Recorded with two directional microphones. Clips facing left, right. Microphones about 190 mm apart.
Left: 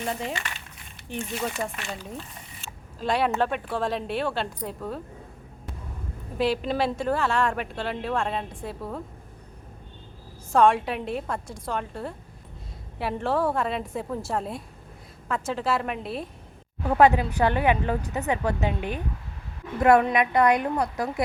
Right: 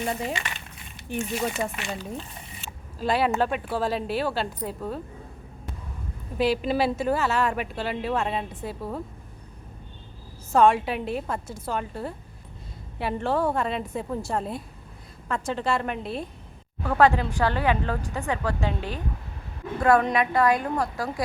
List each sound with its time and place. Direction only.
0.0 s a woman's voice: 5° right (ahead or behind)
3.0 s a woman's voice: centre (ahead or behind)
6.3 s a woman's voice: centre (ahead or behind)
10.5 s a woman's voice: centre (ahead or behind)
16.8 s a woman's voice: 20° left (ahead or behind)
20.1 s speech: 20° left (ahead or behind)